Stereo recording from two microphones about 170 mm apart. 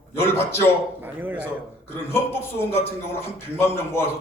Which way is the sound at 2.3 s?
15° left (ahead or behind).